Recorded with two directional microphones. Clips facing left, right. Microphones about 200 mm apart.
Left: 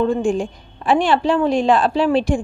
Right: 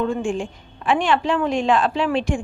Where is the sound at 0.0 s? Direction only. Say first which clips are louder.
Left 5 dB; 35° left (ahead or behind).